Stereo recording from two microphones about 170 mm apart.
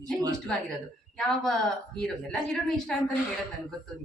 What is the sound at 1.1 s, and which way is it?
A woman's voice, centre (ahead or behind).